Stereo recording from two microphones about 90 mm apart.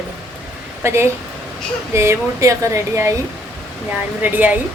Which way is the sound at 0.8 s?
30° right (ahead or behind).